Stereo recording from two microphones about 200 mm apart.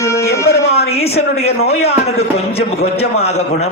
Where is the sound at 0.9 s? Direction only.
30° left (ahead or behind).